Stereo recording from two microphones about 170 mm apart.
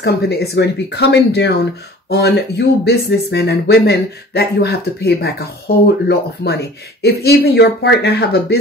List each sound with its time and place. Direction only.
0.0 s speech: 70° left (ahead or behind)